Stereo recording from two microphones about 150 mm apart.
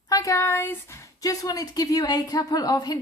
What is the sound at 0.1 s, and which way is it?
A woman's voice, 20° left (ahead or behind).